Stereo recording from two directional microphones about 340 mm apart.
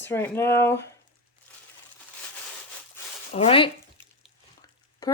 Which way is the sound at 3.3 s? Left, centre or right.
Centre.